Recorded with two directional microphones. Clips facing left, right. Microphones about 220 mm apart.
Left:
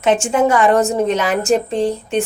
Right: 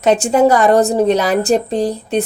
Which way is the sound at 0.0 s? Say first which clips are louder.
Right 3 dB; 40° right (ahead or behind).